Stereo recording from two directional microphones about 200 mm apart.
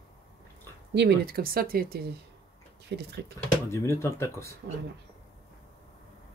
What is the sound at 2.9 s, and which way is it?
Speech, 60° right (ahead or behind).